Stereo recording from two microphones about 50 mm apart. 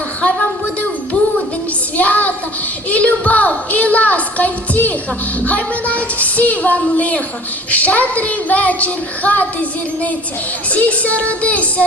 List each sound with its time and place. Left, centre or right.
2.0 s a sound: left
2.9 s a woman's voice: left
10.7 s a woman's voice: left